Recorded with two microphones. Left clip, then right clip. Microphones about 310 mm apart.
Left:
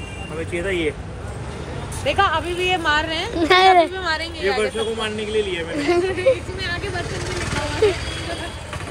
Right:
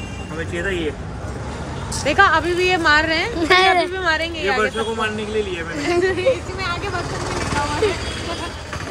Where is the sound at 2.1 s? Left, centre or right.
Right.